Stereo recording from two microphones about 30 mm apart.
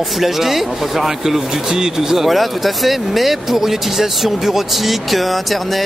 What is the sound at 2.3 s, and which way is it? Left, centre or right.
Speech, centre.